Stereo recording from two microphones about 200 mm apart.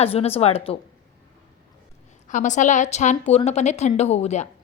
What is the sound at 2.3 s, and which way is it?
A woman's voice, 40° left (ahead or behind).